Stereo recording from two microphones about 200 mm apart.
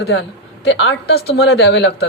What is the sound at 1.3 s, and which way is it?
Speech, 60° left (ahead or behind).